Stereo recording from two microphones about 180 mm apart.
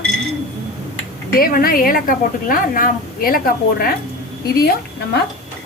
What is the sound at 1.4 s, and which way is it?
A woman's voice, 55° left (ahead or behind).